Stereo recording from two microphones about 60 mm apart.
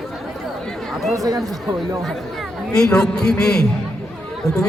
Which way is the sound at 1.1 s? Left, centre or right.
Right.